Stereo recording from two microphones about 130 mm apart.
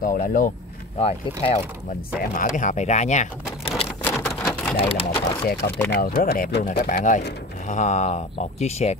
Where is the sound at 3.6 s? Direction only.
45° left (ahead or behind).